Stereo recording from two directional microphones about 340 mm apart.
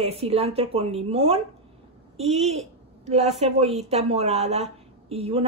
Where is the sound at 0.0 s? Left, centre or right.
Centre.